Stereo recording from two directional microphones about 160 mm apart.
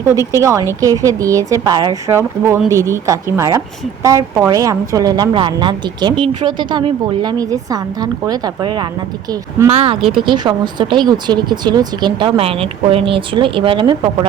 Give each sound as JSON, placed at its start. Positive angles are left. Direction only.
{"t": 0.2, "sound": "speech", "side_deg": 20}
{"t": 0.7, "sound": "a woman's voice", "side_deg": -20}
{"t": 9.6, "sound": "speech", "side_deg": -40}
{"t": 10.2, "sound": "a woman's voice", "side_deg": -25}